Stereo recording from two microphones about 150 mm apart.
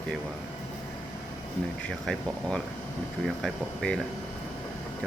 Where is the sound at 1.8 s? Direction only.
5° left (ahead or behind).